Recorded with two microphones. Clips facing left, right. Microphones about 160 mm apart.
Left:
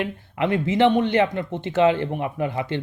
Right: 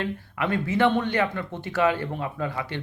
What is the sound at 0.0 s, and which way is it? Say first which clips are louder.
Speech: left 4 dB; 20° left (ahead or behind).